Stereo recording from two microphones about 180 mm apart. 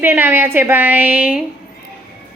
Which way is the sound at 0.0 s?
10° right (ahead or behind).